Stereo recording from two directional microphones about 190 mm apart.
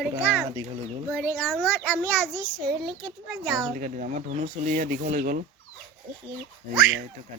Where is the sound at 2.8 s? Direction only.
25° right (ahead or behind).